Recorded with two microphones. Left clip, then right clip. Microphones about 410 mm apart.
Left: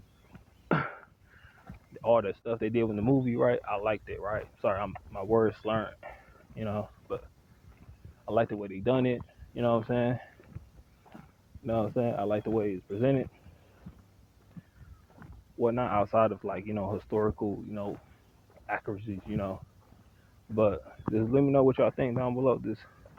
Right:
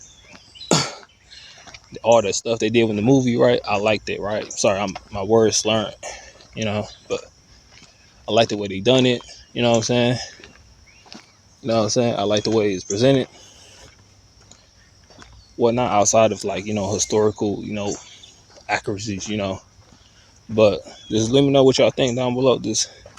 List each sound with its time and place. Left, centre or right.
0.7 s a sound: left
2.4 s speech: left
8.2 s speech: left
11.6 s speech: left
15.5 s speech: left